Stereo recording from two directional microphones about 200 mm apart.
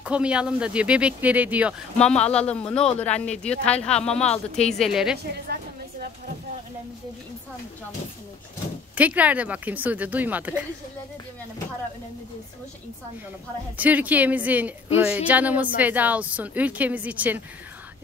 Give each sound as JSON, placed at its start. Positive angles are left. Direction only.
{"t": 0.0, "sound": "speech", "side_deg": -5}
{"t": 2.0, "sound": "speech", "side_deg": 5}
{"t": 5.2, "sound": "a sound", "side_deg": -50}
{"t": 8.9, "sound": "speech", "side_deg": -5}
{"t": 13.7, "sound": "speech", "side_deg": -10}